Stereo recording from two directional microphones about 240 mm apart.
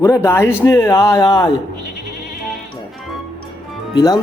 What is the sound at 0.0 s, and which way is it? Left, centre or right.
Speech, centre.